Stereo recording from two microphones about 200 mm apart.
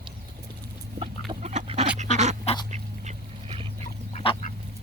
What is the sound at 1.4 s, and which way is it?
Duck, 35° right (ahead or behind).